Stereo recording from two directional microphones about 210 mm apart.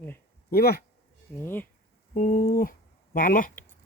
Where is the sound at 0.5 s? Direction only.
45° left (ahead or behind).